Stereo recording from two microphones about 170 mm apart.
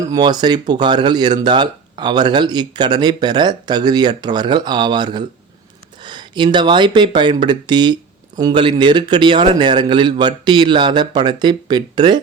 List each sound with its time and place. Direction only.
0.0 s speech: 20° right (ahead or behind)